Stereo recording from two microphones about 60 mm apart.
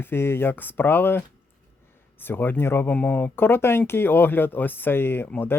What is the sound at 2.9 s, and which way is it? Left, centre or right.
Speech, left.